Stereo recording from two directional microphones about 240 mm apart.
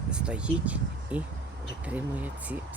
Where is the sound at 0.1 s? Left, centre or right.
Centre.